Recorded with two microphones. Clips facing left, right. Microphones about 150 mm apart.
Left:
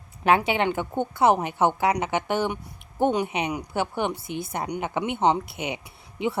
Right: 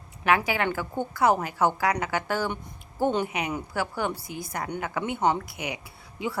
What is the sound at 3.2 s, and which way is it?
Speech, 25° left (ahead or behind).